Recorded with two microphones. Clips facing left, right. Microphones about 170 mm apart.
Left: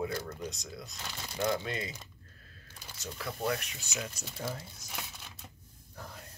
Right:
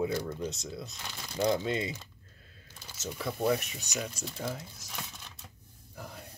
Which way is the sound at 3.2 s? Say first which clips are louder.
Right 5 dB; 25° right (ahead or behind).